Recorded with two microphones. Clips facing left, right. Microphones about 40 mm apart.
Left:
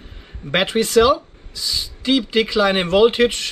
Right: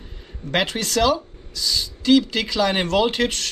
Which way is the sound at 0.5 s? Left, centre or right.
Centre.